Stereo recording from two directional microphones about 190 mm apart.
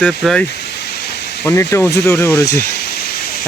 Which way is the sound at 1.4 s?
15° left (ahead or behind).